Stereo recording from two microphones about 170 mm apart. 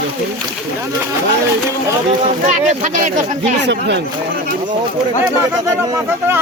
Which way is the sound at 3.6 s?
90° right.